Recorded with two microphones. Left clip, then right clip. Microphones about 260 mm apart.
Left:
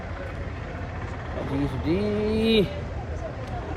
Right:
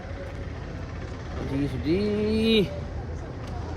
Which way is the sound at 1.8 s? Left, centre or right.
Centre.